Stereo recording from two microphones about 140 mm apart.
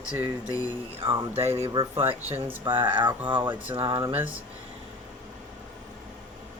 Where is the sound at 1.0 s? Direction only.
25° right (ahead or behind).